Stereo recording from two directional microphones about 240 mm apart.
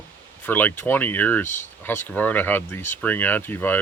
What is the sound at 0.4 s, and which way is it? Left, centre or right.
Speech, centre.